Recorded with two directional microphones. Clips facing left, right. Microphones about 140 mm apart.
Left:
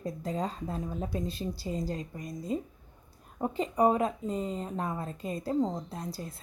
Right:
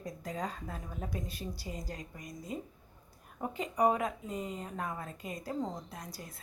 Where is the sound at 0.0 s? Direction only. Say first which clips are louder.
Left 5 dB; 25° left (ahead or behind).